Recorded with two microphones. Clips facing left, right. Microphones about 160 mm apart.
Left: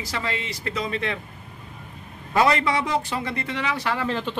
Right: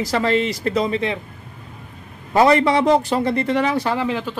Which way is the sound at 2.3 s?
35° right (ahead or behind).